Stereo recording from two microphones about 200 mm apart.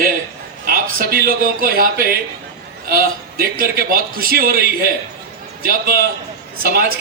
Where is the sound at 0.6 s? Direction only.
45° right (ahead or behind).